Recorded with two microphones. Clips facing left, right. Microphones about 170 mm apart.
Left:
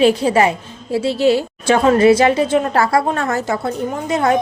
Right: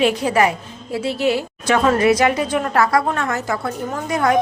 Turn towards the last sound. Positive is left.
turn(degrees=25)  # may be behind; listen again after turning